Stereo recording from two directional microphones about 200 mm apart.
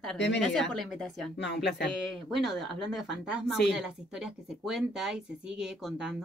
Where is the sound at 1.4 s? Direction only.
60° left (ahead or behind).